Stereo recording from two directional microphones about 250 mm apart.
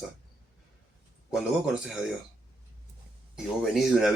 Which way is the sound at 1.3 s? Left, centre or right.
Centre.